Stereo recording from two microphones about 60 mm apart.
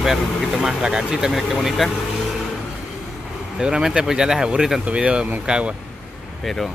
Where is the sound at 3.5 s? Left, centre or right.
Centre.